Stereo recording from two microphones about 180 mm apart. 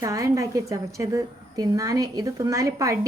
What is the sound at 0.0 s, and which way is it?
Speech, 20° right (ahead or behind).